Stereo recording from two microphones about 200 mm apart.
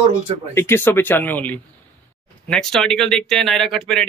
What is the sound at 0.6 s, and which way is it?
Speech, 10° left (ahead or behind).